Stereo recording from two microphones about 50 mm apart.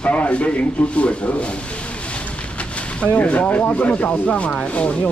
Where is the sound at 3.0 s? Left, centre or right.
Left.